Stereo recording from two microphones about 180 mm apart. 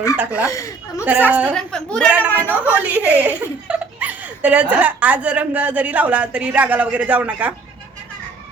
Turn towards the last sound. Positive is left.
turn(degrees=-10)  # may be behind; listen again after turning